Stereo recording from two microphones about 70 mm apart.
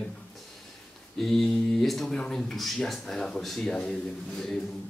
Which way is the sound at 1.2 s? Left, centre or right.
Centre.